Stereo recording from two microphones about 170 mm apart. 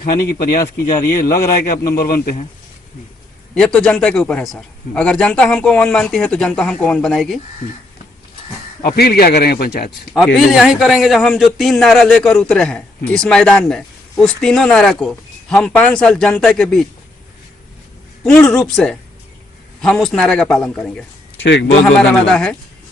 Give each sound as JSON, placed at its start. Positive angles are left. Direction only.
{"t": 0.0, "sound": "a man's voice", "side_deg": 60}
{"t": 3.5, "sound": "a man's voice", "side_deg": 5}
{"t": 9.0, "sound": "a man's voice", "side_deg": 65}
{"t": 10.2, "sound": "a man's voice", "side_deg": 0}
{"t": 18.2, "sound": "a man's voice", "side_deg": 5}
{"t": 21.3, "sound": "a man's voice", "side_deg": 90}
{"t": 21.9, "sound": "a man's voice", "side_deg": 5}